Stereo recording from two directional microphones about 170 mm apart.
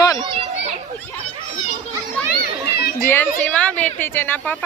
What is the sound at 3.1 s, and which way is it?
Speech, 10° left (ahead or behind).